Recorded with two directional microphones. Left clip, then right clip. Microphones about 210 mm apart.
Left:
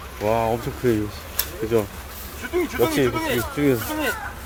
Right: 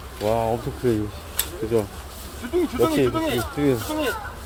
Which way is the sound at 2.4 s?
45° right (ahead or behind).